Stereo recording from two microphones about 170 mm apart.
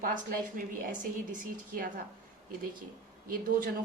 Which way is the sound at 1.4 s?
55° right (ahead or behind).